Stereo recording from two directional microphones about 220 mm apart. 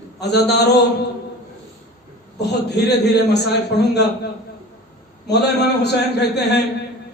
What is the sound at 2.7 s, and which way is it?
A man's voice, 50° left (ahead or behind).